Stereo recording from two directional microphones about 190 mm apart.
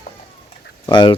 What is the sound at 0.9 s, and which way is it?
Speech, 25° left (ahead or behind).